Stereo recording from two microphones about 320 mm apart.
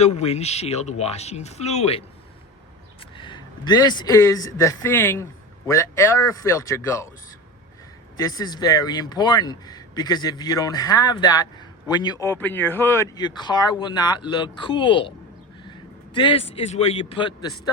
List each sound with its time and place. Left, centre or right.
0.0 s speech: centre
3.2 s a man's voice: centre
8.1 s a man's voice: centre
16.1 s a man's voice: centre